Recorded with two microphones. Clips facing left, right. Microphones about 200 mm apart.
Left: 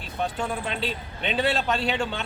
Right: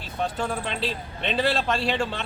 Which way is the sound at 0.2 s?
Centre (ahead or behind).